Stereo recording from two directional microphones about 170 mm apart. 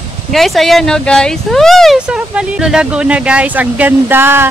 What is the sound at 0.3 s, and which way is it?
Speech, centre (ahead or behind).